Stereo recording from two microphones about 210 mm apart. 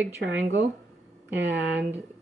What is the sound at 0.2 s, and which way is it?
Speech, 60° right (ahead or behind).